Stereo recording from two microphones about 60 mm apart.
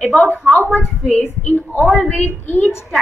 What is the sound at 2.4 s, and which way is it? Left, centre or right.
Speech, left.